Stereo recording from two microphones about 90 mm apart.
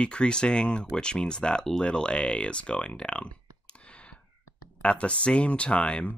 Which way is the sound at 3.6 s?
10° left (ahead or behind).